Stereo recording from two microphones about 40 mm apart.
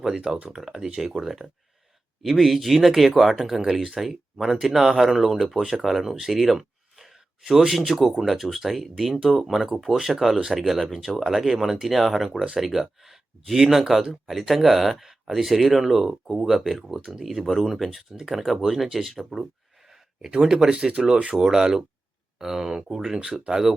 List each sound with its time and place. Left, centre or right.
0.0 s speech: centre
20.3 s speech: centre
20.7 s speech: right